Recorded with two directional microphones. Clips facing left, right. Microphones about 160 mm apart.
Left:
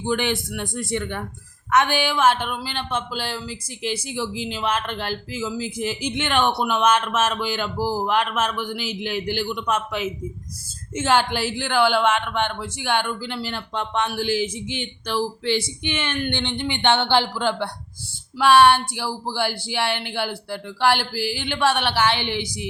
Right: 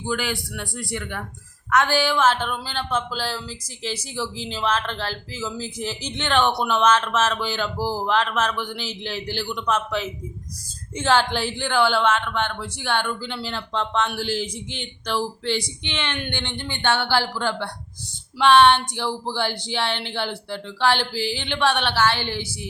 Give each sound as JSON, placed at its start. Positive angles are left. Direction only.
{"t": 0.0, "sound": "speech", "side_deg": 20}